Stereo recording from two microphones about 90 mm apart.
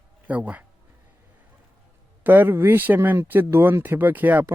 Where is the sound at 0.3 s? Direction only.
15° right (ahead or behind).